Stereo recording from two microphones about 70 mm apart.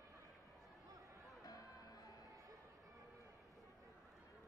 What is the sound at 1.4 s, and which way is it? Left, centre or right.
Music, left.